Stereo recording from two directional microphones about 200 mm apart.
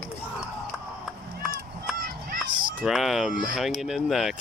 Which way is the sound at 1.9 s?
45° right (ahead or behind).